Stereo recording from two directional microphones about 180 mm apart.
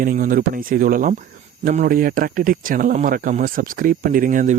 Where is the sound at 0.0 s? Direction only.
50° right (ahead or behind).